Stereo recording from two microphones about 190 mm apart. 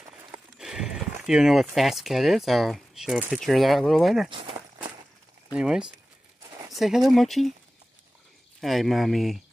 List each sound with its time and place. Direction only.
0.6 s speech: 5° right (ahead or behind)
4.3 s speech: 25° right (ahead or behind)
5.5 s speech: 5° right (ahead or behind)
8.5 s speech: centre (ahead or behind)